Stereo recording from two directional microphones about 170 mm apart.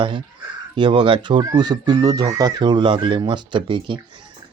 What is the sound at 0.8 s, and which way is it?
Speech, 30° right (ahead or behind).